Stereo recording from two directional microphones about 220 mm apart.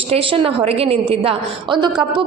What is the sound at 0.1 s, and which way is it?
A woman's voice, 25° right (ahead or behind).